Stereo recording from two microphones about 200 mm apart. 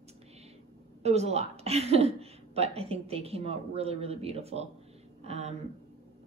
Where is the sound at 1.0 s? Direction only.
30° right (ahead or behind).